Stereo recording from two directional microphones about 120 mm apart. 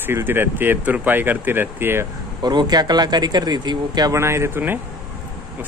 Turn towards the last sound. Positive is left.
turn(degrees=-15)  # may be behind; listen again after turning